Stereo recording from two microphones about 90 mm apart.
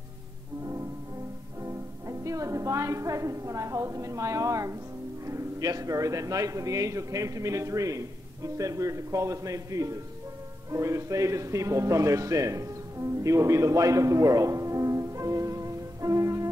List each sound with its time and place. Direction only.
1.6 s music: 35° right (ahead or behind)
5.2 s a man's voice: 35° right (ahead or behind)